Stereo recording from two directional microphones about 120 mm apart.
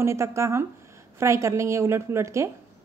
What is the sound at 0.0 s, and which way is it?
A woman's voice, 25° right (ahead or behind).